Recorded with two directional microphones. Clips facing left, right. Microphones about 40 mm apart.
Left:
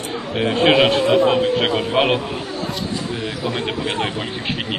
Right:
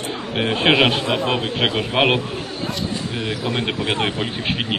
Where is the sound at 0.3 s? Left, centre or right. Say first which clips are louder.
Left 2 dB; centre.